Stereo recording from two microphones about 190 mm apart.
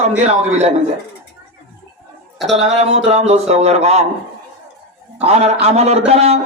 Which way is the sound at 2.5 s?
35° right (ahead or behind).